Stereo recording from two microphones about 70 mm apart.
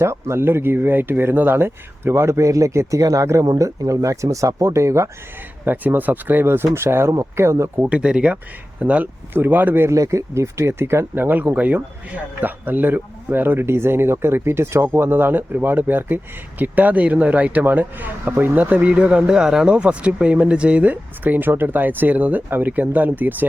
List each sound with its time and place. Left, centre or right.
0.0 s speech: right
5.6 s speech: right
7.1 s speech: right
7.8 s speech: centre
9.9 s speech: right